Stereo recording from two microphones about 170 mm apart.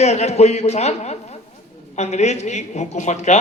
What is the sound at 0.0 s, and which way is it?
A man's voice, 40° left (ahead or behind).